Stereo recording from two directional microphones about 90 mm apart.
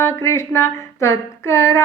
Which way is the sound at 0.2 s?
30° left (ahead or behind).